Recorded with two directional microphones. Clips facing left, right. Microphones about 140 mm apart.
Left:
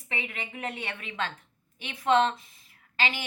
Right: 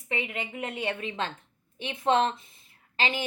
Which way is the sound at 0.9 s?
25° right (ahead or behind).